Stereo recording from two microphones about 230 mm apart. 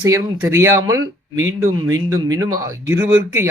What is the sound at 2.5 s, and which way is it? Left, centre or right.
Speech, centre.